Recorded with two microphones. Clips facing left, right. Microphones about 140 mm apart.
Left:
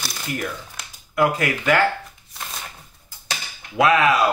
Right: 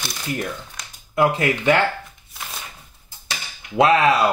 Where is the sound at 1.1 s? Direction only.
25° right (ahead or behind).